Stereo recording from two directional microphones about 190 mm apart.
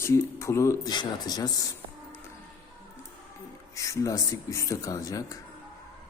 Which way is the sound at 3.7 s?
15° left (ahead or behind).